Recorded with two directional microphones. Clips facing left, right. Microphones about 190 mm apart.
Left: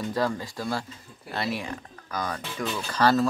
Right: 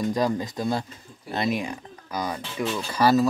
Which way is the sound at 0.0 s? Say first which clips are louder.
Right 3 dB; 15° right (ahead or behind).